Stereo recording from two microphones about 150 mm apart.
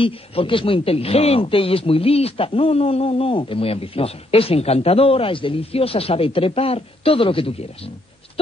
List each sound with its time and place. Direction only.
0.0 s speech: 35° left (ahead or behind)